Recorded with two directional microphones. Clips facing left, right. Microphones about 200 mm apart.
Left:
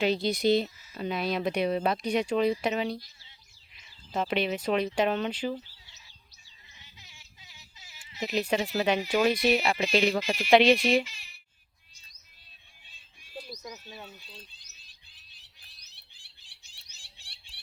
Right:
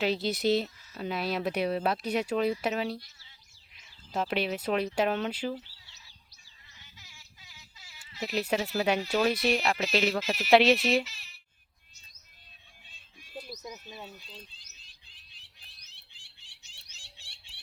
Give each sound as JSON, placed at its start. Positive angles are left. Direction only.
{"t": 0.0, "sound": "speech", "side_deg": -5}
{"t": 4.2, "sound": "speech", "side_deg": -5}
{"t": 6.7, "sound": "a sound", "side_deg": 20}
{"t": 8.4, "sound": "speech", "side_deg": -5}
{"t": 9.0, "sound": "speech", "side_deg": 10}
{"t": 13.5, "sound": "a sound", "side_deg": -5}
{"t": 13.8, "sound": "speech", "side_deg": 0}